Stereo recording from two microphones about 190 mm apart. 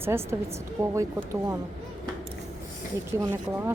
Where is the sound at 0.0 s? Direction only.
15° right (ahead or behind).